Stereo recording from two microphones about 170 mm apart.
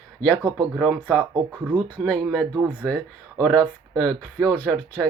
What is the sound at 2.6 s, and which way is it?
Speech, 10° right (ahead or behind).